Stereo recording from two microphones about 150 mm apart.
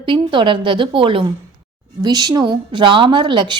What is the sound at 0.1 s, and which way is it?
A woman's voice, 35° right (ahead or behind).